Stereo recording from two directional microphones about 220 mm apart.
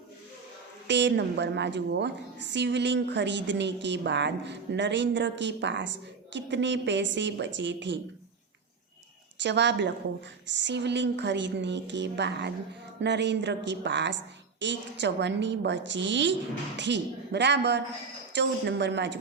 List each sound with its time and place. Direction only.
0.9 s a woman's voice: 50° right (ahead or behind)
9.4 s a woman's voice: 50° right (ahead or behind)